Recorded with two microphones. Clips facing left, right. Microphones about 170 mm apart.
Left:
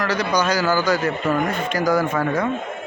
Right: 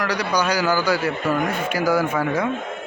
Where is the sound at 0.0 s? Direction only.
10° right (ahead or behind).